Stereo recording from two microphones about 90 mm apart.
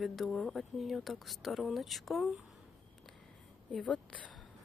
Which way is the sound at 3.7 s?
10° left (ahead or behind).